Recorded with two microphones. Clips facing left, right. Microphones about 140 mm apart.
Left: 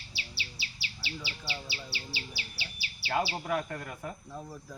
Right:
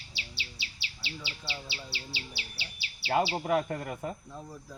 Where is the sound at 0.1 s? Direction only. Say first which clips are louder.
Even; 20° right (ahead or behind).